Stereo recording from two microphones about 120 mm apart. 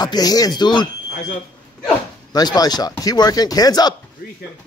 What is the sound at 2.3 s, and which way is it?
Speech, 35° left (ahead or behind).